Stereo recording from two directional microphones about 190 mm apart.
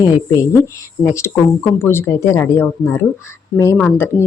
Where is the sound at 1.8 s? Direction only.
15° left (ahead or behind).